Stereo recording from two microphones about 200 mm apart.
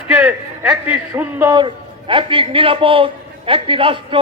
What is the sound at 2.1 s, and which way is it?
A man's voice, 25° right (ahead or behind).